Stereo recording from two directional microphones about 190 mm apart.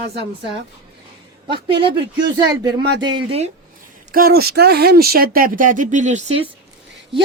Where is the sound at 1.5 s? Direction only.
30° right (ahead or behind).